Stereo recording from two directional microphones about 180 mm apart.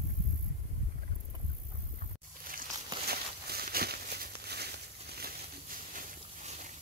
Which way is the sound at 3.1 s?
60° right (ahead or behind).